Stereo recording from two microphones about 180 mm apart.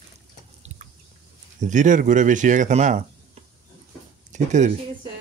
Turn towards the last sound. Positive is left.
turn(degrees=-40)  # may be behind; listen again after turning